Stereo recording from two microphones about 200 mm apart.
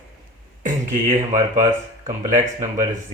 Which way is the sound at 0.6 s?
40° right (ahead or behind).